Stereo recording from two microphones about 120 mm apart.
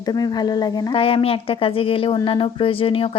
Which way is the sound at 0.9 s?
50° left (ahead or behind).